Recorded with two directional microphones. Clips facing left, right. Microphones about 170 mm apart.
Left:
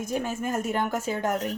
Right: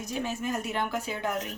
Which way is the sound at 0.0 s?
50° left (ahead or behind).